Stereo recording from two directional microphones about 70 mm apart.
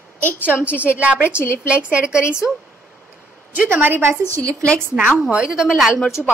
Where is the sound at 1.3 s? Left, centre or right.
Left.